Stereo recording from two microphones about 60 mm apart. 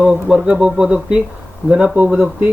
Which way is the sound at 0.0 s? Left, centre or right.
Centre.